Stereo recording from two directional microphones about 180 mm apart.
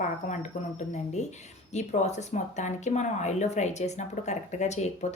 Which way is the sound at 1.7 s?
40° left (ahead or behind).